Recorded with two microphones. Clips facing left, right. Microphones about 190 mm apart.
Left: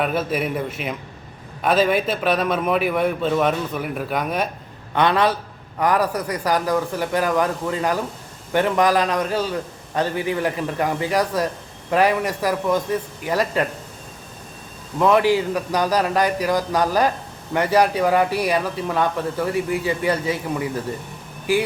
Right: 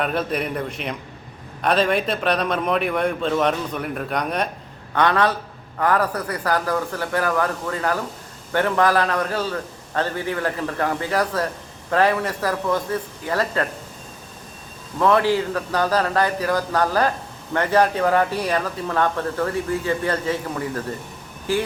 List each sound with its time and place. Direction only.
0.0 s a man's voice: 5° left (ahead or behind)
4.9 s speech: 15° left (ahead or behind)
14.9 s speech: 15° left (ahead or behind)